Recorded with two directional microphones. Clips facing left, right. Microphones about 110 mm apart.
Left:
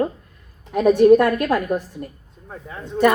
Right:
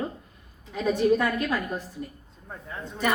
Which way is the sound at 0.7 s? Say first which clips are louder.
Left 10 dB; 65° left (ahead or behind).